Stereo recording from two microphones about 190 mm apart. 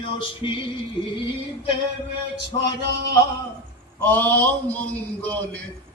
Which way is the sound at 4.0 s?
10° left (ahead or behind).